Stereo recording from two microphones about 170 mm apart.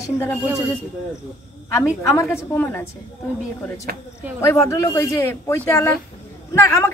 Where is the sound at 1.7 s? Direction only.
20° left (ahead or behind).